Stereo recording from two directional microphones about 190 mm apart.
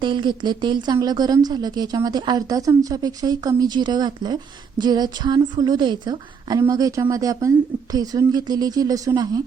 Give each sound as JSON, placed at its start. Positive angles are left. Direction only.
{"t": 0.0, "sound": "a woman's voice", "side_deg": -25}